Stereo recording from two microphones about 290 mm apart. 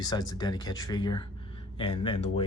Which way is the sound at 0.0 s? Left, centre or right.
Centre.